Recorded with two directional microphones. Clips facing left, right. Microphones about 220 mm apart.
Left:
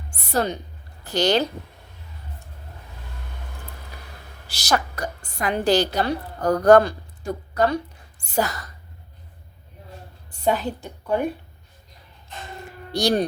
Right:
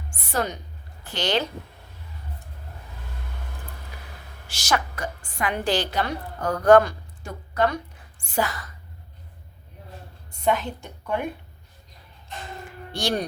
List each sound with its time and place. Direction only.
0.3 s a woman's voice: 35° left (ahead or behind)
4.4 s a woman's voice: 35° left (ahead or behind)
8.2 s a woman's voice: 40° left (ahead or behind)
10.4 s a woman's voice: 35° left (ahead or behind)
12.9 s a woman's voice: 40° left (ahead or behind)